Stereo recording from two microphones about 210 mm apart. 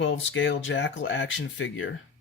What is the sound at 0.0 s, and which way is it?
Speech, 60° left (ahead or behind).